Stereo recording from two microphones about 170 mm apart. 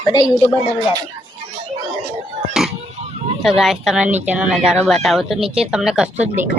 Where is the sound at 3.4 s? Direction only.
Centre (ahead or behind).